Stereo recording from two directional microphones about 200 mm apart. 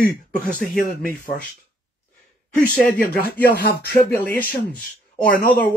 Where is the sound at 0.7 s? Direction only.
45° left (ahead or behind).